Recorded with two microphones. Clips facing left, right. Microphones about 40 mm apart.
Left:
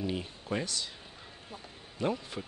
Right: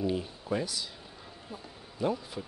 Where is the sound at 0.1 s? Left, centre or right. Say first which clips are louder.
Right 3 dB; left.